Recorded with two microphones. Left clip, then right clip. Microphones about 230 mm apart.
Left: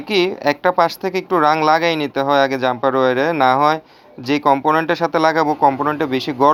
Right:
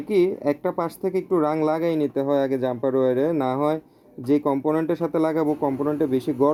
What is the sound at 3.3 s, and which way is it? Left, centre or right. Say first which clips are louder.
Speech: left 9 dB; centre.